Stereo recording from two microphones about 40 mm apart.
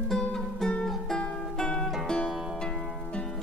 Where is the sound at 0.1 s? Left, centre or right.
Centre.